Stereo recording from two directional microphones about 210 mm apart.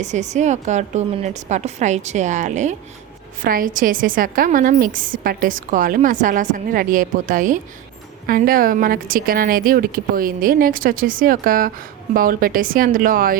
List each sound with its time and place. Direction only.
0.0 s a woman's voice: 35° right (ahead or behind)